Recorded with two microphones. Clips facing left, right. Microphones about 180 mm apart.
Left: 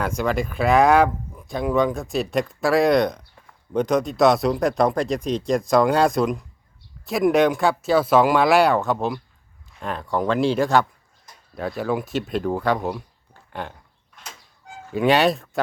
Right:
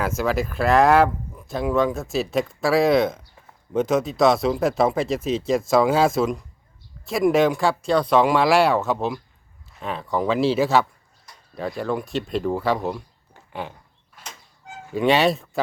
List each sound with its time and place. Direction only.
0.0 s speech: 5° right (ahead or behind)
14.2 s a sound: 10° right (ahead or behind)
14.9 s speech: centre (ahead or behind)